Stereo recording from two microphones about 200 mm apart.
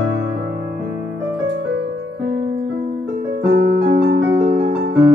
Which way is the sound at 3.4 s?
55° right (ahead or behind).